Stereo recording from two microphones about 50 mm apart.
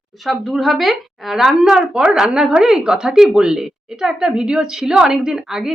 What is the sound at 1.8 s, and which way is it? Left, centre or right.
Speech, centre.